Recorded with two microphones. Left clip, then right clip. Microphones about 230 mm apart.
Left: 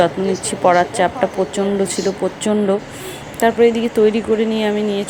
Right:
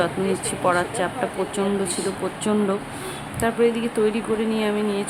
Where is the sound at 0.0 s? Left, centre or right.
Centre.